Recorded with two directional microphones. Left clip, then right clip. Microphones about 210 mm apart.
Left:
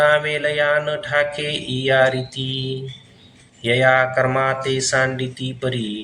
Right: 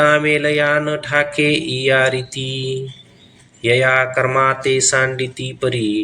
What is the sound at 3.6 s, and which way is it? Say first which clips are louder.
Mantra: right 1 dB; 20° right (ahead or behind).